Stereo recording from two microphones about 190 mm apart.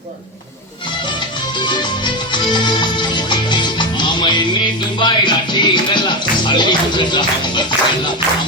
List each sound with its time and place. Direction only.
1.5 s music: 25° left (ahead or behind)